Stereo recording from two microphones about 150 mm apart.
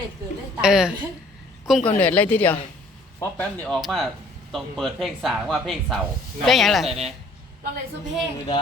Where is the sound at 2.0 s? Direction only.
10° left (ahead or behind).